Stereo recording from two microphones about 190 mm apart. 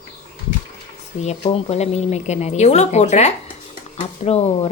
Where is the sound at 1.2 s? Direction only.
35° left (ahead or behind).